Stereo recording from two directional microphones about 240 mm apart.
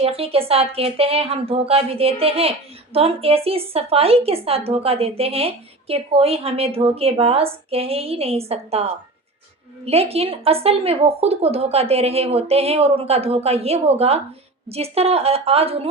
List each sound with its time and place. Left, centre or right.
0.0 s speech: right